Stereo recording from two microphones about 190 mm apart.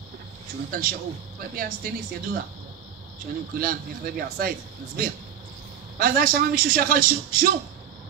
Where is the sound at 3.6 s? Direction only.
50° right (ahead or behind).